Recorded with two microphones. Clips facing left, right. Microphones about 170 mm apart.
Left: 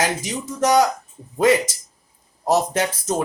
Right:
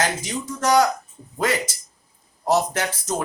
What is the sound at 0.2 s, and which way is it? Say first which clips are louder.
Speech: left 4 dB; 20° left (ahead or behind).